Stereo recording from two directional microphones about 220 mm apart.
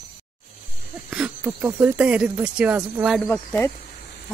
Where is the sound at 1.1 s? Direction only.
5° right (ahead or behind).